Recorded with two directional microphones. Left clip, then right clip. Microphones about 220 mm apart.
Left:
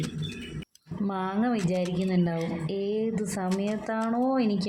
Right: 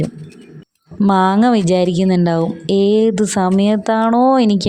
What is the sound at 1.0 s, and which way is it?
Speech, 45° right (ahead or behind).